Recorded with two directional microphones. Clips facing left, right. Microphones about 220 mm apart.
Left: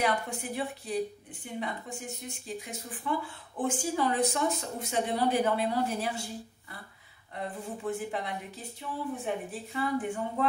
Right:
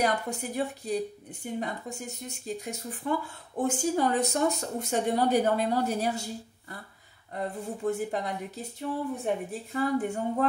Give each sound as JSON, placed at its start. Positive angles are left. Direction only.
{"t": 0.0, "sound": "speech", "side_deg": -40}
{"t": 7.9, "sound": "speech", "side_deg": -40}